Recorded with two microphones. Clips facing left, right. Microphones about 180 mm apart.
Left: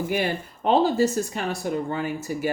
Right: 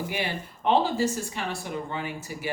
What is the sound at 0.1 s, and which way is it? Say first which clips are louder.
Speech: left 6 dB; 45° left (ahead or behind).